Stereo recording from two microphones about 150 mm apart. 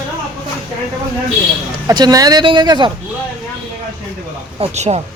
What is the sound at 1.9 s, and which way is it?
Speech, 25° right (ahead or behind).